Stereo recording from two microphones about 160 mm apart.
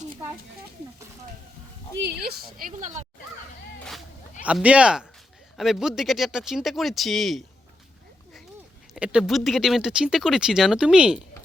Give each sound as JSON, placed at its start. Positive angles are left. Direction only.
{"t": 2.0, "sound": "a woman's voice", "side_deg": -85}
{"t": 4.4, "sound": "speech", "side_deg": -10}
{"t": 8.9, "sound": "speech", "side_deg": -5}